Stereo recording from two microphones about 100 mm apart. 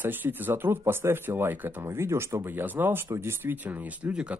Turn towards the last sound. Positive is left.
turn(degrees=-10)  # may be behind; listen again after turning